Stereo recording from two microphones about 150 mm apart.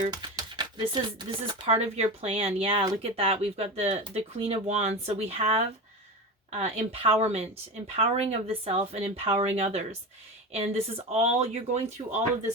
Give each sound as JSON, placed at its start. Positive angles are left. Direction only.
{"t": 0.0, "sound": "speech", "side_deg": -25}
{"t": 1.6, "sound": "a woman's voice", "side_deg": -45}